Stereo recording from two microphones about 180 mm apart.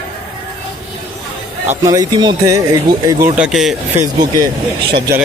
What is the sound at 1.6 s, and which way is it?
Speech, 20° right (ahead or behind).